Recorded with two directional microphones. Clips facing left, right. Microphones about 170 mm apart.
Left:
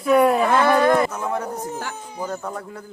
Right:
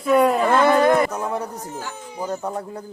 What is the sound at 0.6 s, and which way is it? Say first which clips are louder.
Speech: right 1 dB; 15° right (ahead or behind).